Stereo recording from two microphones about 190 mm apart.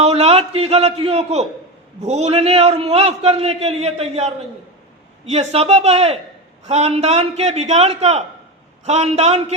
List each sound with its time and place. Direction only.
0.0 s a man's voice: 35° right (ahead or behind)